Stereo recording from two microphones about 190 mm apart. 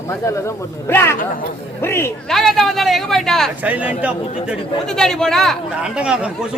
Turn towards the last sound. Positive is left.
turn(degrees=-5)  # may be behind; listen again after turning